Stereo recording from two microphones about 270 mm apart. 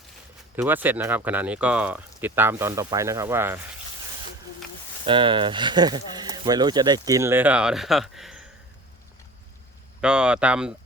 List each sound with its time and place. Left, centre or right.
0.5 s speech: centre
5.0 s speech: centre
10.0 s speech: centre